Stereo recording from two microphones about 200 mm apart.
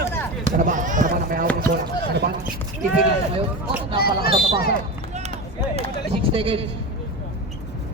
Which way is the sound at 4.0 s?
50° left (ahead or behind).